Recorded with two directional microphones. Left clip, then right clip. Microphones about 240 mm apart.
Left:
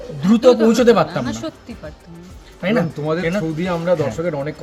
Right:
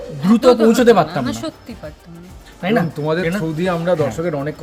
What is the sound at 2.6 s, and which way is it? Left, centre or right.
Speech, centre.